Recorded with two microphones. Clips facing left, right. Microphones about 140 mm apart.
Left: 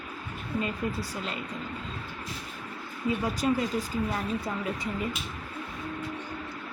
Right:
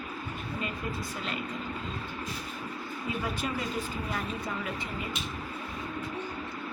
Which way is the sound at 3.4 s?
30° left (ahead or behind).